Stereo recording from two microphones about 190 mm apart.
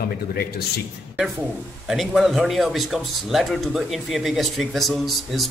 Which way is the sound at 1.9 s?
Centre (ahead or behind).